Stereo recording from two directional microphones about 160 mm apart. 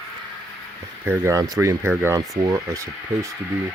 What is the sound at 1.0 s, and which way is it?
Speech, 15° right (ahead or behind).